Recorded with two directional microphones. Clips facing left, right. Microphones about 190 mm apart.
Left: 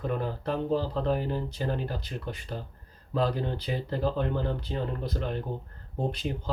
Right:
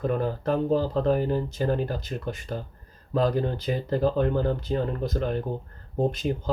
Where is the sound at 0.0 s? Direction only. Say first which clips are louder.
Right 5 dB; 45° right (ahead or behind).